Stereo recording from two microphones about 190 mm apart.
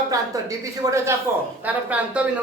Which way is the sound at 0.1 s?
20° right (ahead or behind).